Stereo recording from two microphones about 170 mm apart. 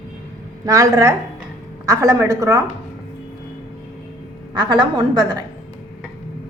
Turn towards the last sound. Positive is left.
turn(degrees=-25)  # may be behind; listen again after turning